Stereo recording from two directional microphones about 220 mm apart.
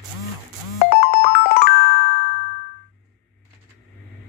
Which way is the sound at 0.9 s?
45° left (ahead or behind).